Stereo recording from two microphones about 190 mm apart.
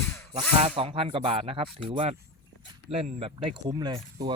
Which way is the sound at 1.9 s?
35° right (ahead or behind).